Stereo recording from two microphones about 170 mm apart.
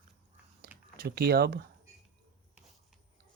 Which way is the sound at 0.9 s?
65° right (ahead or behind).